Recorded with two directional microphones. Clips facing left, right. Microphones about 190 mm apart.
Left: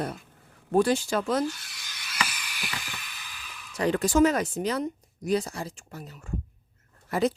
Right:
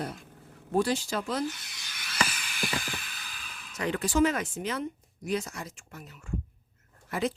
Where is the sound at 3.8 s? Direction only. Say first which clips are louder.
Left 4 dB; 40° left (ahead or behind).